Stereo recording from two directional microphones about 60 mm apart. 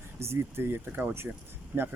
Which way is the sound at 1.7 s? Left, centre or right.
Right.